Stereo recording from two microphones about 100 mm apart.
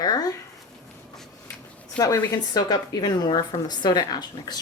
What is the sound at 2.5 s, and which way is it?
A woman's voice, 40° left (ahead or behind).